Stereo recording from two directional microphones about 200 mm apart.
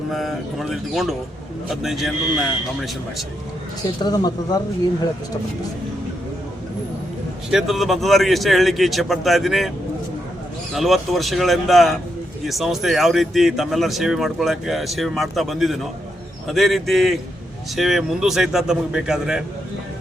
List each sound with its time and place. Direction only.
0.1 s speech: centre (ahead or behind)
4.0 s speech: 20° left (ahead or behind)
7.5 s speech: centre (ahead or behind)
10.8 s speech: centre (ahead or behind)